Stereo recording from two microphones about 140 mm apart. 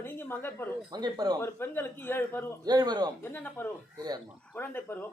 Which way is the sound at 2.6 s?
30° right (ahead or behind).